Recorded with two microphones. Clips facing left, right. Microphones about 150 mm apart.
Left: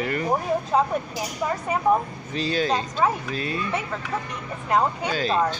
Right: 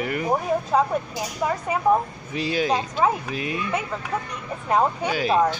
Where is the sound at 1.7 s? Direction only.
10° right (ahead or behind).